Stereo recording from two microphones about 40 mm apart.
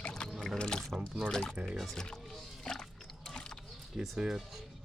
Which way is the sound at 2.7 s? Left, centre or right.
Centre.